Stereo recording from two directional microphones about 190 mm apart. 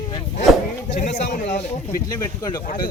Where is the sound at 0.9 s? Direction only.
40° left (ahead or behind).